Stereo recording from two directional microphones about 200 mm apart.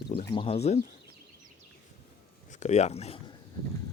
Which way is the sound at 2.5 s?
35° left (ahead or behind).